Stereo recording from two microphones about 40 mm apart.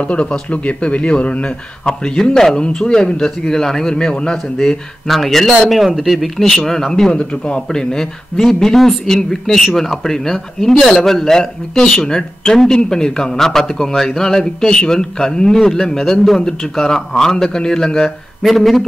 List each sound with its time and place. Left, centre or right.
0.0 s a man's voice: left; by 2.5 s centre
2.5 s a man's voice: left
4.6 s a man's voice: centre
7.1 s a man's voice: left
18.4 s speech: centre